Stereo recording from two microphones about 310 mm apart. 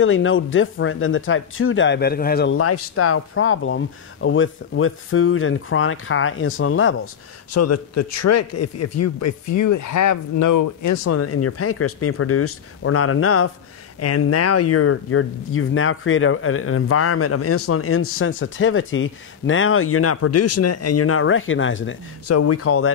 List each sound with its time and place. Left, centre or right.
0.0 s speech: left
2.5 s speech: left
7.5 s speech: left